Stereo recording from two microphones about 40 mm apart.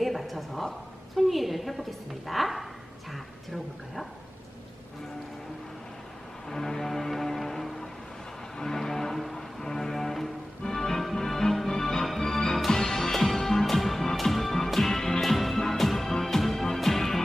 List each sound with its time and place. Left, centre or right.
0.0 s a sound: centre
1.1 s a woman's voice: centre
6.5 s music: centre